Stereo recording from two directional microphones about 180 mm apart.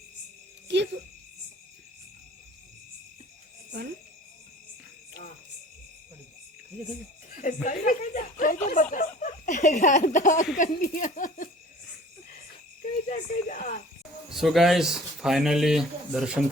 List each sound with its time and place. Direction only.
0.7 s cricket: 75° right (ahead or behind)
7.4 s speech: 45° left (ahead or behind)
13.1 s speech: 45° left (ahead or behind)
14.3 s speech: centre (ahead or behind)